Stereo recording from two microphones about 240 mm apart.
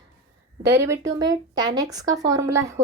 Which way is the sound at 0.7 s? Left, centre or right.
Centre.